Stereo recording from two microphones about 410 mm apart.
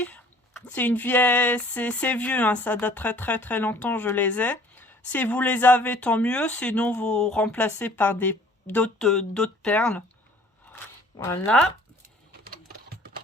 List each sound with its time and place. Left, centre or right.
0.0 s speech: centre
11.2 s speech: centre
12.5 s typing: right